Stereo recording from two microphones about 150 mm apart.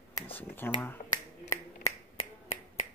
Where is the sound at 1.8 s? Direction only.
50° left (ahead or behind).